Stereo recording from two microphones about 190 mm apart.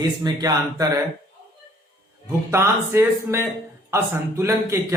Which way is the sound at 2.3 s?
15° right (ahead or behind).